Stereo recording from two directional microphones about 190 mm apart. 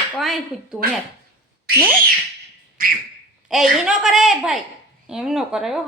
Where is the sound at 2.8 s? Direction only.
50° right (ahead or behind).